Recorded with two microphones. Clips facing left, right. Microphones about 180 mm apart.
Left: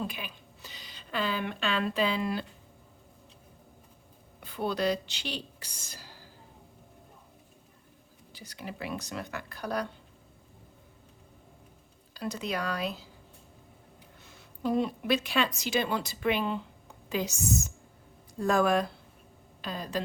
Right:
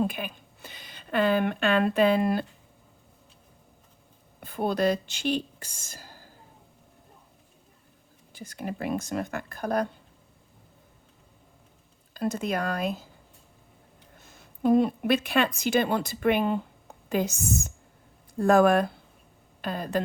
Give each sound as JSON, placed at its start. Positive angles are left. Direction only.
{"t": 0.0, "sound": "speech", "side_deg": -50}
{"t": 4.4, "sound": "speech", "side_deg": -50}
{"t": 8.3, "sound": "speech", "side_deg": -50}
{"t": 12.1, "sound": "speech", "side_deg": -50}
{"t": 14.2, "sound": "a woman's voice", "side_deg": -45}